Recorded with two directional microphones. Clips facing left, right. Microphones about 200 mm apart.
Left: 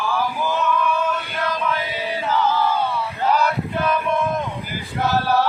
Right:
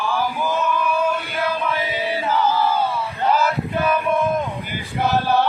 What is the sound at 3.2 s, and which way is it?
Male singing, centre (ahead or behind).